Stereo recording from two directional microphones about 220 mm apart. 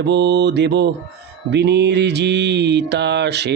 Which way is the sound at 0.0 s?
50° right (ahead or behind).